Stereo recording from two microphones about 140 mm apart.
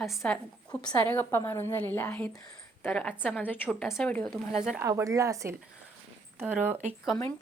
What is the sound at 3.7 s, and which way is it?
Speech, 5° right (ahead or behind).